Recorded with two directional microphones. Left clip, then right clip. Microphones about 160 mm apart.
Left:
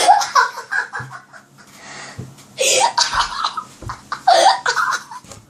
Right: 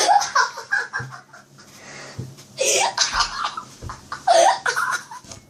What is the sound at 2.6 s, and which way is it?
Cough, 20° left (ahead or behind).